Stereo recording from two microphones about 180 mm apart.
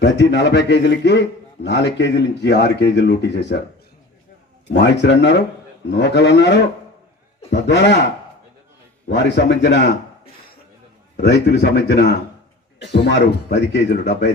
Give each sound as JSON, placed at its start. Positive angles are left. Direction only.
{"t": 0.0, "sound": "speech", "side_deg": 75}
{"t": 4.7, "sound": "speech", "side_deg": 70}
{"t": 9.0, "sound": "speech", "side_deg": 75}
{"t": 11.2, "sound": "speech", "side_deg": 70}